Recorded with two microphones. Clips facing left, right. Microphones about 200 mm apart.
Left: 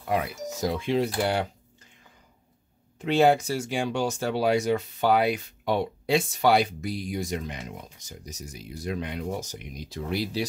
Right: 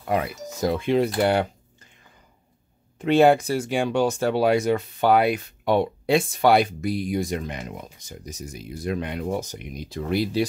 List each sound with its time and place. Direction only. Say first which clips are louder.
0.1 s speech: right 2 dB; 55° right (ahead or behind)
3.0 s speech: right 4 dB; 55° right (ahead or behind)